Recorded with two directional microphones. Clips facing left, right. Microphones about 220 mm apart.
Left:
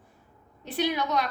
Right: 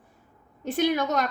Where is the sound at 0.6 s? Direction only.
50° right (ahead or behind).